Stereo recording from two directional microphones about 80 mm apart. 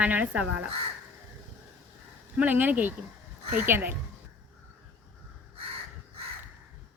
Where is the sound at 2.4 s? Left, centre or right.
Right.